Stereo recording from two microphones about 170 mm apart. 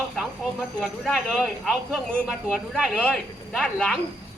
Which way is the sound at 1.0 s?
Centre (ahead or behind).